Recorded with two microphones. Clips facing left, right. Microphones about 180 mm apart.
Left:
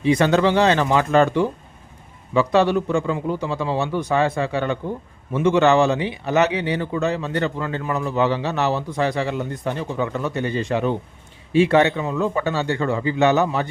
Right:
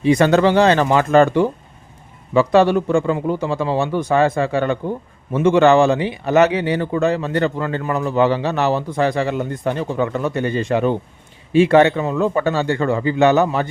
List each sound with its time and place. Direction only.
0.1 s speech: 45° right (ahead or behind)